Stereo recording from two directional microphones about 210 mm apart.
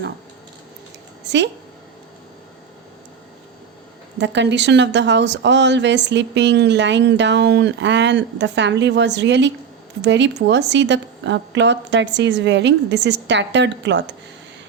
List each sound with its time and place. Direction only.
1.3 s a woman's voice: 55° right (ahead or behind)
4.2 s speech: 55° right (ahead or behind)